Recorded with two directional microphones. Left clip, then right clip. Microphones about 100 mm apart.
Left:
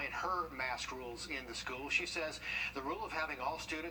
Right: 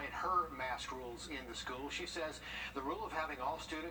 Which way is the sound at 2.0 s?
Centre (ahead or behind).